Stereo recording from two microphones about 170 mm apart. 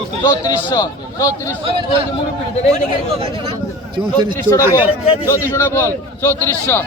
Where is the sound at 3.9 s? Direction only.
30° right (ahead or behind).